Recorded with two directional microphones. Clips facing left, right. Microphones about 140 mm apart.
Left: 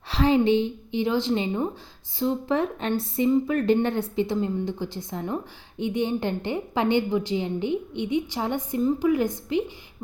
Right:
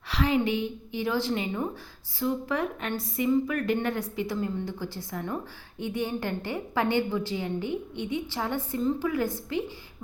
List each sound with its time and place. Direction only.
0.1 s a woman's voice: 30° left (ahead or behind)